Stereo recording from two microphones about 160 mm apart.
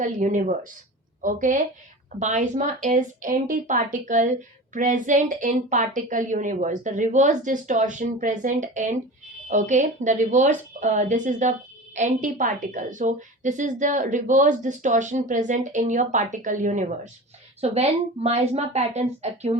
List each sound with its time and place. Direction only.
0.0 s a woman's voice: 55° right (ahead or behind)
17.6 s speech: 40° right (ahead or behind)